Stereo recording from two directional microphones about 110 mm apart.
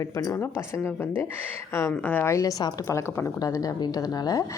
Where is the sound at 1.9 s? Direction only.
15° left (ahead or behind).